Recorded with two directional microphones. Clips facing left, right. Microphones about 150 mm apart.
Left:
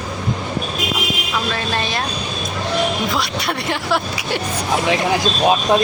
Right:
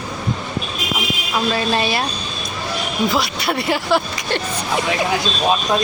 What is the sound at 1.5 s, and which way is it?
Speech, 10° right (ahead or behind).